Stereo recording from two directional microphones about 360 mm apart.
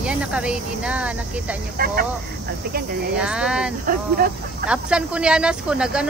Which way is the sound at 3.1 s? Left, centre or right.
Centre.